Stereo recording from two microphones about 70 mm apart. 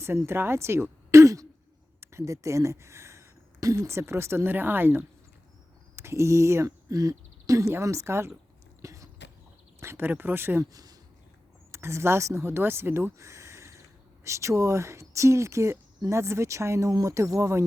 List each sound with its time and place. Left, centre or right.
0.0 s speech: right
6.0 s speech: right
8.8 s cough: right
9.8 s speech: right
10.1 s speech: right
10.6 s speech: right
11.7 s speech: right